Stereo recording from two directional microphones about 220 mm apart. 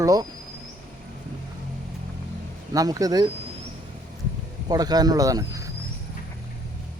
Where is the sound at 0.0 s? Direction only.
15° right (ahead or behind).